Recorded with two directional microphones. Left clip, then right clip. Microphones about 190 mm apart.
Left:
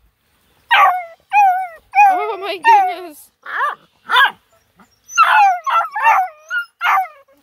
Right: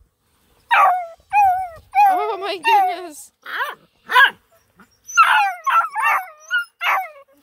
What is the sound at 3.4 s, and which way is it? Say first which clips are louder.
Dog: left 6 dB; 40° right (ahead or behind).